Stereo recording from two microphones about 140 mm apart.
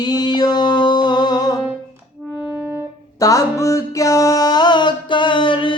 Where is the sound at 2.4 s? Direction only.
10° right (ahead or behind).